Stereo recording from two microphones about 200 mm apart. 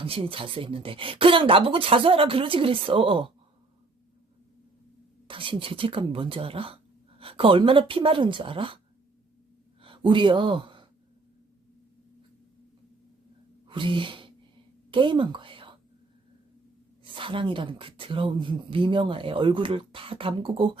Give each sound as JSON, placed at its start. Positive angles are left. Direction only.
{"t": 0.0, "sound": "speech", "side_deg": -30}
{"t": 5.3, "sound": "speech", "side_deg": -25}
{"t": 9.8, "sound": "speech", "side_deg": -25}
{"t": 13.7, "sound": "sneeze", "side_deg": -25}
{"t": 14.8, "sound": "a woman's voice", "side_deg": -25}
{"t": 17.0, "sound": "speech", "side_deg": -25}